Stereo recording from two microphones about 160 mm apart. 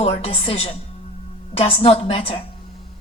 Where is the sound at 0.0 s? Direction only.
40° left (ahead or behind).